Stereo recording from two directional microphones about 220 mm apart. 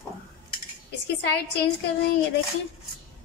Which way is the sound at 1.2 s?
50° left (ahead or behind).